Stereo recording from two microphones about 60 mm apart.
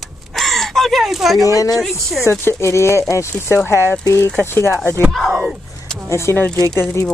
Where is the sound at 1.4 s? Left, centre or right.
Left.